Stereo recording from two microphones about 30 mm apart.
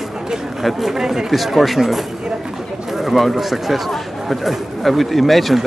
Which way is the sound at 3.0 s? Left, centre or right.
Centre.